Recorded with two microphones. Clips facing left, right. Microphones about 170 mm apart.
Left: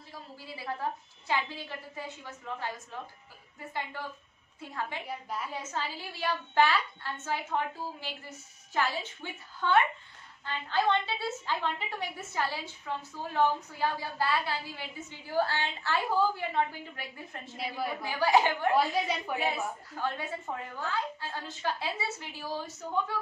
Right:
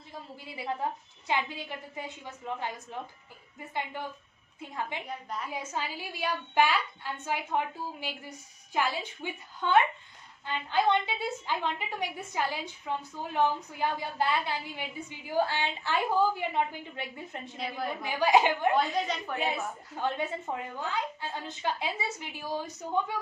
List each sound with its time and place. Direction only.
0.8 s a woman's voice: 20° right (ahead or behind)
5.0 s a woman's voice: 5° left (ahead or behind)
5.5 s a woman's voice: 10° right (ahead or behind)
18.8 s a woman's voice: 10° left (ahead or behind)
20.0 s a woman's voice: 20° right (ahead or behind)